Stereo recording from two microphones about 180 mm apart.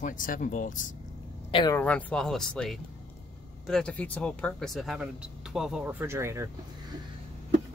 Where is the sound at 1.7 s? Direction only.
5° left (ahead or behind); by 6.5 s 15° right (ahead or behind).